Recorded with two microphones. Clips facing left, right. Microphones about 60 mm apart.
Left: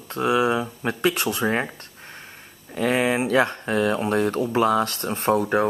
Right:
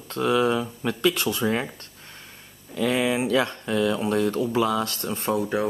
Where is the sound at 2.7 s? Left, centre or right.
Left.